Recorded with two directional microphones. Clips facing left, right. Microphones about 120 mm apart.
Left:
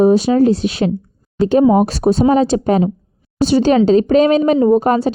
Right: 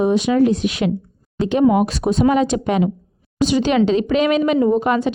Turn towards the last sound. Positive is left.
turn(degrees=40)  # may be behind; listen again after turning